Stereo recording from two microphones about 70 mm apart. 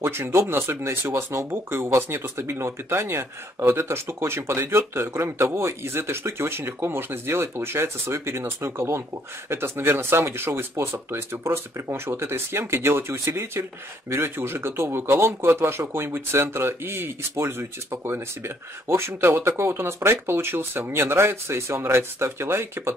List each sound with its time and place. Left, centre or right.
0.0 s speech: right